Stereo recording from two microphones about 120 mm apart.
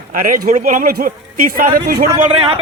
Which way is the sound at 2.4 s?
55° right (ahead or behind).